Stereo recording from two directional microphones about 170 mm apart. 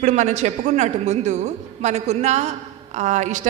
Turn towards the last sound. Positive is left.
turn(degrees=-45)  # may be behind; listen again after turning